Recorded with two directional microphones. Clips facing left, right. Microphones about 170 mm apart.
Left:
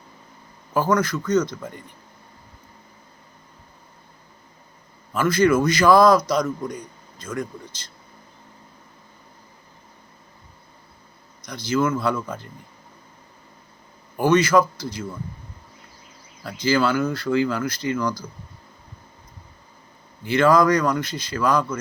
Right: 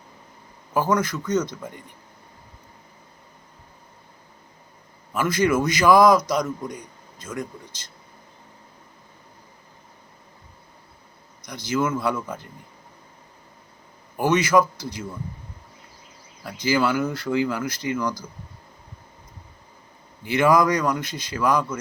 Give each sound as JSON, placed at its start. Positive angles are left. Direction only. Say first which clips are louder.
{"t": 0.7, "sound": "a man's voice", "louder": "left 1 dB", "side_deg": -15}
{"t": 5.1, "sound": "a man's voice", "louder": "left 3 dB", "side_deg": -15}
{"t": 11.4, "sound": "a man's voice", "louder": "left 2 dB", "side_deg": -15}
{"t": 14.3, "sound": "a man's voice", "louder": "left 2 dB", "side_deg": -20}
{"t": 16.6, "sound": "a man's voice", "louder": "left 1 dB", "side_deg": -15}
{"t": 20.2, "sound": "a man's voice", "louder": "left 2 dB", "side_deg": -15}